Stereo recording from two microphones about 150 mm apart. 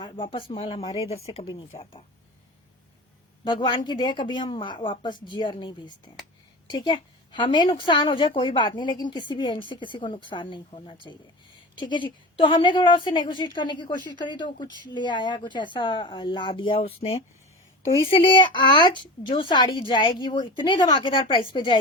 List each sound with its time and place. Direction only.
0.0 s a woman's voice: 35° left (ahead or behind)
3.4 s a woman's voice: 30° left (ahead or behind)